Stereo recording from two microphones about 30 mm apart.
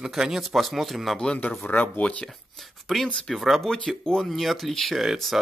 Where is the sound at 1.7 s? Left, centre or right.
Left.